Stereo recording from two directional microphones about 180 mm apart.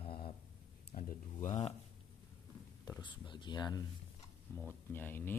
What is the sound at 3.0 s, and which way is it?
Speech, 25° left (ahead or behind).